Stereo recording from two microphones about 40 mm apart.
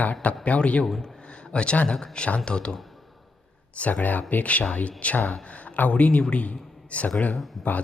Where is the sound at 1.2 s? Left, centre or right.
Left.